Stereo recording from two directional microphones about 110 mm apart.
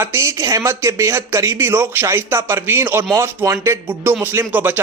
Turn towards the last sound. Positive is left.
turn(degrees=-15)  # may be behind; listen again after turning